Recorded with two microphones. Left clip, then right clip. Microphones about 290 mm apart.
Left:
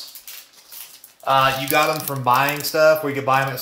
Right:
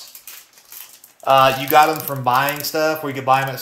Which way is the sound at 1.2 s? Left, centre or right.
Right.